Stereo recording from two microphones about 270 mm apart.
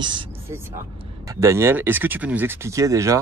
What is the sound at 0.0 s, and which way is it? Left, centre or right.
Speech, centre.